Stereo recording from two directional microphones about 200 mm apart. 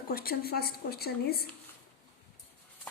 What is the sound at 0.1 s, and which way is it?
A woman's voice, 50° left (ahead or behind).